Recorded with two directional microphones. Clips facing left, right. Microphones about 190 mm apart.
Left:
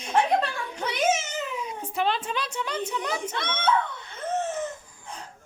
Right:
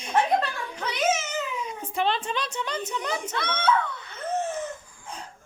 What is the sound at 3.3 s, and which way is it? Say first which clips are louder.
Speech: right 4 dB; 20° left (ahead or behind).